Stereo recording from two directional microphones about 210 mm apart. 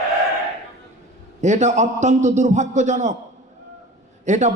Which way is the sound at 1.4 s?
35° right (ahead or behind).